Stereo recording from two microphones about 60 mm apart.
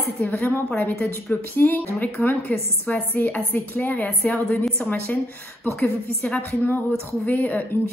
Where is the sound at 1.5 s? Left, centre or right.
Left.